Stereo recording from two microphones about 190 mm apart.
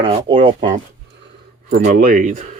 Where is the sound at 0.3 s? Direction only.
25° right (ahead or behind).